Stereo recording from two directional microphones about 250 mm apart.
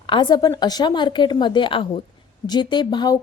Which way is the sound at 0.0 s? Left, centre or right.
Centre.